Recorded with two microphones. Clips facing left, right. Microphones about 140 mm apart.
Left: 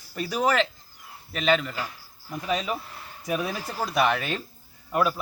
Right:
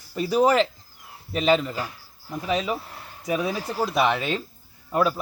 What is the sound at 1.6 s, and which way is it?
Speech, 35° right (ahead or behind).